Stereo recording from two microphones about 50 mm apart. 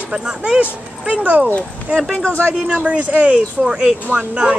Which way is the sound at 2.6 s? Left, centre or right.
Right.